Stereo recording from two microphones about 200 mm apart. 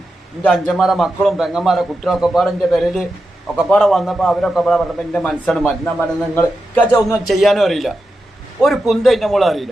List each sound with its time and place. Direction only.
0.4 s a man's voice: 5° left (ahead or behind)
7.3 s a man's voice: centre (ahead or behind)